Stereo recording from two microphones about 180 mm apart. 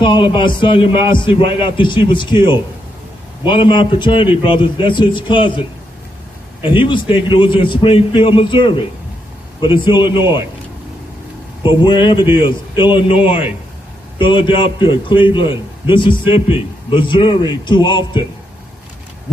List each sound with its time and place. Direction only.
0.0 s a man's voice: 25° left (ahead or behind)
11.6 s a man's voice: 25° left (ahead or behind)